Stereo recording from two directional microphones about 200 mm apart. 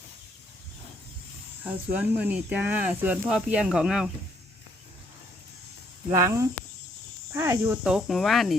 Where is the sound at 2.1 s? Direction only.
10° right (ahead or behind).